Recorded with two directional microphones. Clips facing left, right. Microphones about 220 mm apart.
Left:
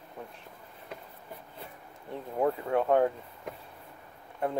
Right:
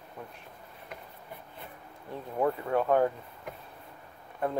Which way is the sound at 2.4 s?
25° left (ahead or behind).